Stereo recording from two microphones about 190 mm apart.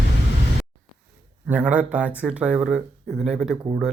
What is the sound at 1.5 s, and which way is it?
Speech, 10° right (ahead or behind).